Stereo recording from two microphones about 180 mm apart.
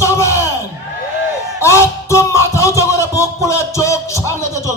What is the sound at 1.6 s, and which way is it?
Music, 15° left (ahead or behind).